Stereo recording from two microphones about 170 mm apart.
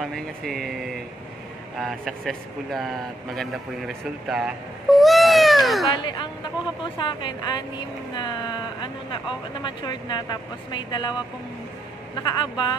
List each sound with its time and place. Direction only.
0.0 s speech: centre (ahead or behind)
6.0 s speech: 30° left (ahead or behind)
12.2 s speech: 25° left (ahead or behind)